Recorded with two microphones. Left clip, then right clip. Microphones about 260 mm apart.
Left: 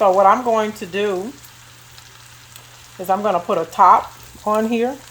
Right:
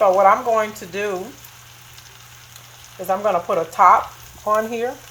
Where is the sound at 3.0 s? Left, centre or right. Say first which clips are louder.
Left 1 dB; left.